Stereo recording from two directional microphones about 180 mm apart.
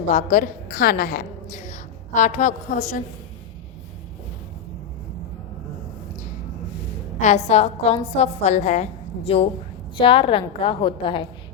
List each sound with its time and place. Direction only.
0.1 s a woman's voice: 45° left (ahead or behind)
7.4 s a woman's voice: 35° left (ahead or behind)